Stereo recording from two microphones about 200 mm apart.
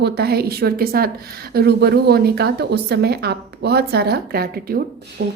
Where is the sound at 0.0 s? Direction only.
50° right (ahead or behind).